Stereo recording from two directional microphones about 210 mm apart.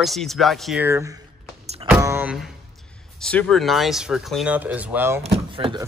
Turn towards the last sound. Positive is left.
turn(degrees=-25)  # may be behind; listen again after turning